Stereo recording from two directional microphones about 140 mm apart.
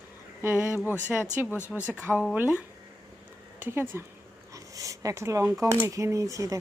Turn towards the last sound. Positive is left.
turn(degrees=-25)  # may be behind; listen again after turning